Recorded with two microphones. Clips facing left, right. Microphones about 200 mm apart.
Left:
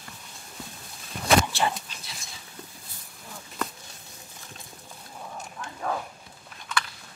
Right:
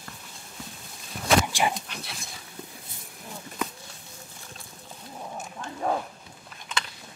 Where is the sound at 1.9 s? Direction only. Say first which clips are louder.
Right 7 dB; 65° right (ahead or behind).